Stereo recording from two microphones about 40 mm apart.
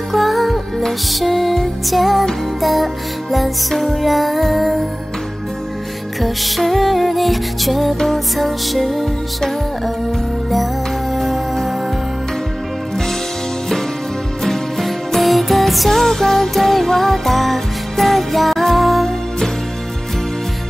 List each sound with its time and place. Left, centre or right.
0.1 s music: centre
6.2 s music: centre
11.1 s music: centre
14.4 s music: centre